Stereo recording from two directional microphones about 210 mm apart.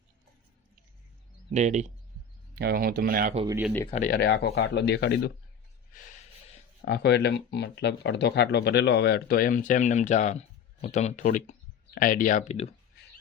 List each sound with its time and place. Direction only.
1.5 s speech: 35° right (ahead or behind)
2.6 s speech: 45° right (ahead or behind)
3.9 s speech: 40° left (ahead or behind)
6.8 s speech: 50° left (ahead or behind); by 12.7 s 30° left (ahead or behind)